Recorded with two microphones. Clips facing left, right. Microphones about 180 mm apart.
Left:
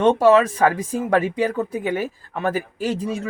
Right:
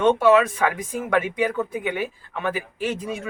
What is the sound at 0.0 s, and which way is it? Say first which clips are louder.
Speech: left 2 dB; 40° left (ahead or behind).